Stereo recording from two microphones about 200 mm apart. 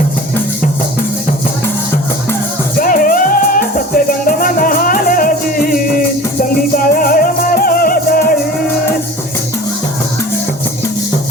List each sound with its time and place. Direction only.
2.7 s music: 45° left (ahead or behind)